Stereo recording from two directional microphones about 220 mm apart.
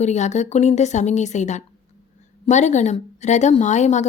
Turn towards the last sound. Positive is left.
turn(degrees=30)  # may be behind; listen again after turning